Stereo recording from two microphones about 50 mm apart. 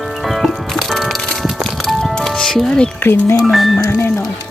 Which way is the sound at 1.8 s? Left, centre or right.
Centre.